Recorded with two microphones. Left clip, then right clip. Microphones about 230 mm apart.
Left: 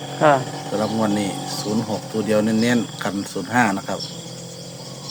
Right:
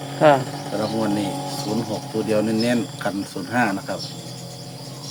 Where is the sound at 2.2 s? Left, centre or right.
Left.